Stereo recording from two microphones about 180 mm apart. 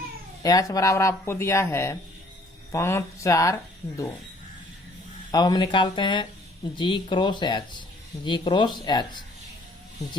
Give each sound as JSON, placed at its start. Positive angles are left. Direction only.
{"t": 0.4, "sound": "speech", "side_deg": 20}
{"t": 5.3, "sound": "speech", "side_deg": 20}